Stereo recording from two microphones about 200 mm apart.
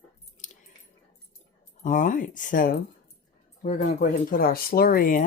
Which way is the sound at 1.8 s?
40° left (ahead or behind).